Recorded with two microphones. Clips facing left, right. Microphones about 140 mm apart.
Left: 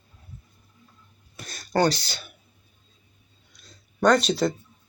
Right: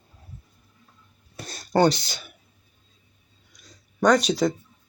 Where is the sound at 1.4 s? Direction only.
30° right (ahead or behind).